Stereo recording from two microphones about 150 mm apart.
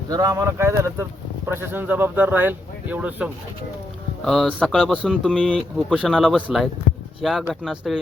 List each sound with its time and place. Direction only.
0.1 s speech: 25° right (ahead or behind)
4.3 s speech: centre (ahead or behind)